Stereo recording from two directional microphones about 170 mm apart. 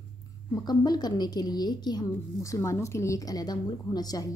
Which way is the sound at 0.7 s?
25° left (ahead or behind).